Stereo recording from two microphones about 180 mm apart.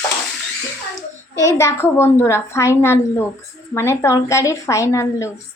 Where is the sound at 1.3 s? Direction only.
15° left (ahead or behind).